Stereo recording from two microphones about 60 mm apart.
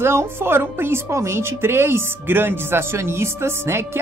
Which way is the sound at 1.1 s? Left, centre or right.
Right.